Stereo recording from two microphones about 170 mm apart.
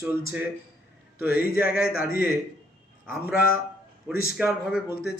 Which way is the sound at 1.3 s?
60° left (ahead or behind).